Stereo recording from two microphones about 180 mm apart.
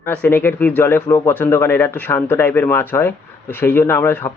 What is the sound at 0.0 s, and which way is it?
Speech, 10° left (ahead or behind).